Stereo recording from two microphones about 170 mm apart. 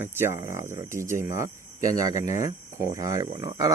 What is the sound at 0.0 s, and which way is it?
Speech, 15° right (ahead or behind).